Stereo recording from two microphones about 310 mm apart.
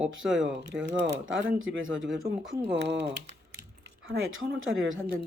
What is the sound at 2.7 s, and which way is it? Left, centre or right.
Speech, right.